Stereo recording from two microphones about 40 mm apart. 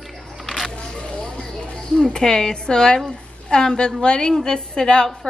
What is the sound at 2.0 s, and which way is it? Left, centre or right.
Cutlery, centre.